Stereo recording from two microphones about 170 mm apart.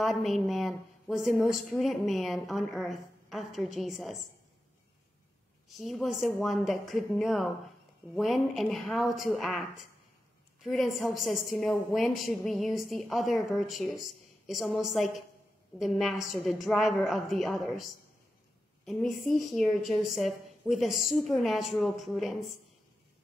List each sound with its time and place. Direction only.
0.0 s a woman's voice: centre (ahead or behind)
5.7 s a woman's voice: centre (ahead or behind)
18.9 s a woman's voice: centre (ahead or behind)